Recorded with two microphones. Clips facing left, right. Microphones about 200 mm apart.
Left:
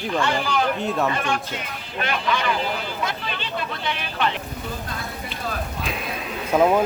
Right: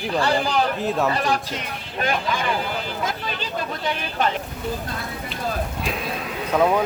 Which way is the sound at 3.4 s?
40° right (ahead or behind).